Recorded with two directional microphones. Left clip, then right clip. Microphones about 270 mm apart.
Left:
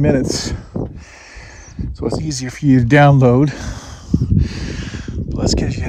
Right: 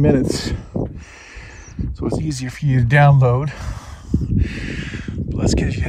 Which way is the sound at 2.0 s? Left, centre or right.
Left.